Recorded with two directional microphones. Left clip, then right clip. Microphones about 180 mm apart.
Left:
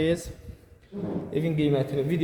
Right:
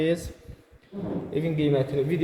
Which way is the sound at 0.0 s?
10° left (ahead or behind).